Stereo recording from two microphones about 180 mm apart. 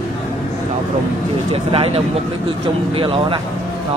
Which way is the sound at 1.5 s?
30° right (ahead or behind).